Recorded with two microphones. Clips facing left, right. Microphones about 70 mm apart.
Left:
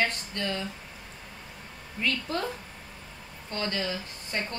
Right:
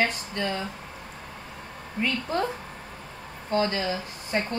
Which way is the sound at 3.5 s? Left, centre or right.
Right.